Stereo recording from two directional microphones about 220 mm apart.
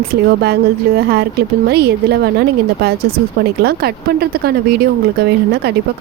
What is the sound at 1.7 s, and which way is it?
Speech, 45° right (ahead or behind).